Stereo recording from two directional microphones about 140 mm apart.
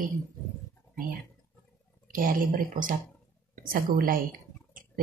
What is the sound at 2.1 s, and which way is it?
Speech, 85° right.